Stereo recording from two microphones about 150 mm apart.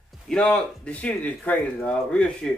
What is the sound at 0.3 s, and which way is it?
Speech, 5° left (ahead or behind).